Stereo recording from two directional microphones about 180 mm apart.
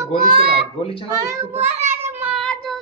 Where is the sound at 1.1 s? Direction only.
15° right (ahead or behind).